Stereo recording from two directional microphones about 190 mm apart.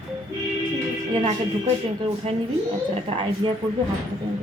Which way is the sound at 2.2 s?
30° right (ahead or behind).